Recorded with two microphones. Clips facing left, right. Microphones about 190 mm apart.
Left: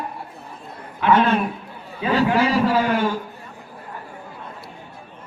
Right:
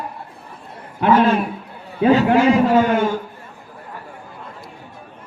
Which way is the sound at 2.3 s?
25° right (ahead or behind).